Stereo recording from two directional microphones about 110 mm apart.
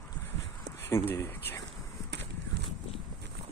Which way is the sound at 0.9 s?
25° left (ahead or behind).